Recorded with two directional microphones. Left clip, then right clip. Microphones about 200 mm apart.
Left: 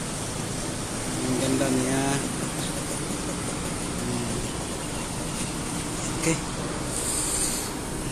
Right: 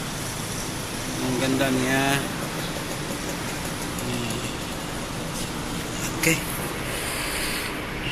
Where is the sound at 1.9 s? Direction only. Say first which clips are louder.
Right 4 dB; centre (ahead or behind).